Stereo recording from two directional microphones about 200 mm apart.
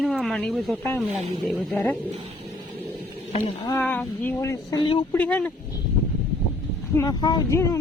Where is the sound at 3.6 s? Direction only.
15° left (ahead or behind).